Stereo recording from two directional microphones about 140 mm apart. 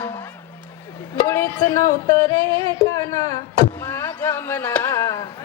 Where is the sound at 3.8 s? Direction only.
15° left (ahead or behind).